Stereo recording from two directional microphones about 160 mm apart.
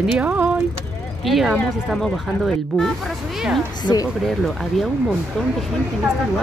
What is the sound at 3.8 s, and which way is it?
Speech, 25° left (ahead or behind).